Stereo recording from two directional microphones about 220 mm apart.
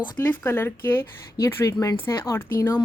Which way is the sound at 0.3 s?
10° left (ahead or behind).